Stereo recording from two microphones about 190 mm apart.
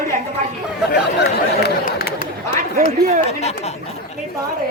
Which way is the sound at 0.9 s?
55° left (ahead or behind).